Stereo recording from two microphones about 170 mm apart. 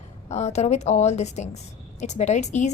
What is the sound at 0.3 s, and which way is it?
A woman's voice, 40° left (ahead or behind).